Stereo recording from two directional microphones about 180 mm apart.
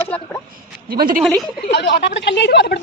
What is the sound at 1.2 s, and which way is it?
Speech, centre (ahead or behind).